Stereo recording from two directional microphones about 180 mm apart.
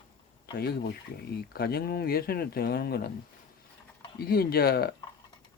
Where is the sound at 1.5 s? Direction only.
60° left (ahead or behind).